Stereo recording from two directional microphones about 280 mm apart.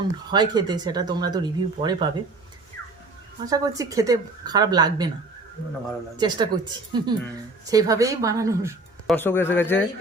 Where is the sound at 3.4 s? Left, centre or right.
Centre.